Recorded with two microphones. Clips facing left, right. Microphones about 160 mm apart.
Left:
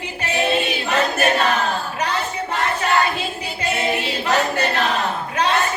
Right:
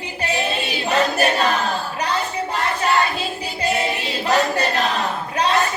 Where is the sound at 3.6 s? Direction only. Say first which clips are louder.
Even; 35° right (ahead or behind).